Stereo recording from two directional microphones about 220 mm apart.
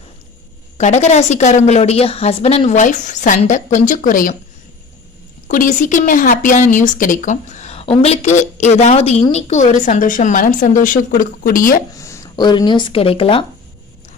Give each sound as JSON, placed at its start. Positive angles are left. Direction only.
{"t": 0.8, "sound": "a woman's voice", "side_deg": 30}
{"t": 5.5, "sound": "a woman's voice", "side_deg": 35}
{"t": 11.9, "sound": "speech", "side_deg": 15}